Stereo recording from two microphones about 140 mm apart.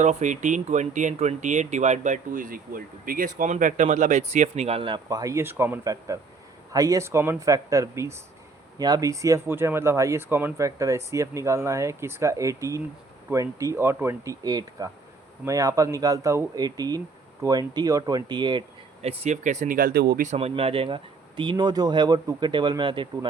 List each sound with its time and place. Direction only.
0.0 s speech: 60° right (ahead or behind); by 4.9 s 40° right (ahead or behind)
5.0 s speech: 25° right (ahead or behind)
19.0 s speech: 55° right (ahead or behind); by 20.3 s 90° right
20.3 s speech: 45° right (ahead or behind)